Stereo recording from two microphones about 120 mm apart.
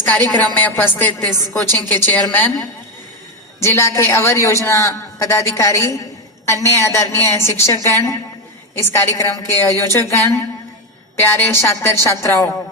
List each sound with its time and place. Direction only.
0.0 s a woman's voice: 15° left (ahead or behind)